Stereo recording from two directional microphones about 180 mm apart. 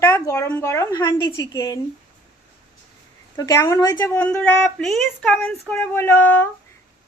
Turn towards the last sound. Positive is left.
turn(degrees=10)  # may be behind; listen again after turning